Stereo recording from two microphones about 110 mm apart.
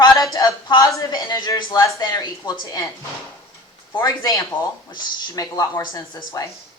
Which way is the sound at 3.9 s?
35° left (ahead or behind).